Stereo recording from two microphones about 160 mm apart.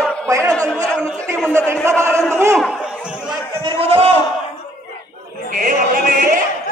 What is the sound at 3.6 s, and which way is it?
Speech, 35° right (ahead or behind).